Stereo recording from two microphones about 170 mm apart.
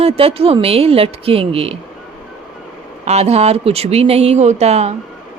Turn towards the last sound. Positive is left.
turn(degrees=-40)  # may be behind; listen again after turning